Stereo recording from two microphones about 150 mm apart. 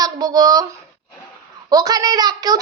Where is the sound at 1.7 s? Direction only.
25° right (ahead or behind).